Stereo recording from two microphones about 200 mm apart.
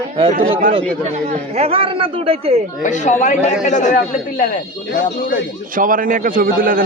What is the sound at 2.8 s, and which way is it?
A man's voice, 40° left (ahead or behind).